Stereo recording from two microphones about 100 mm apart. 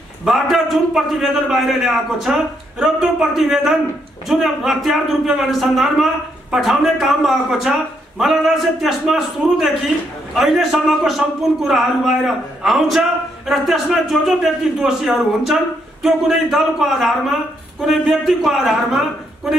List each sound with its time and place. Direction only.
0.2 s speech: centre (ahead or behind)